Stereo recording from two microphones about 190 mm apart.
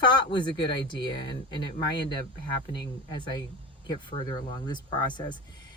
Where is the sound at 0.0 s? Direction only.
25° left (ahead or behind).